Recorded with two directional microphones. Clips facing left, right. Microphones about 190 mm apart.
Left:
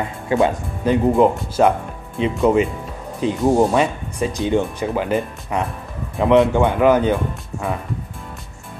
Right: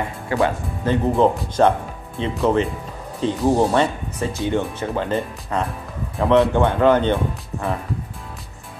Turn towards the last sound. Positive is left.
turn(degrees=5)  # may be behind; listen again after turning